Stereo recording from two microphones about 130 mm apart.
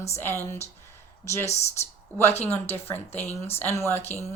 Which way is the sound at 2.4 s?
15° left (ahead or behind).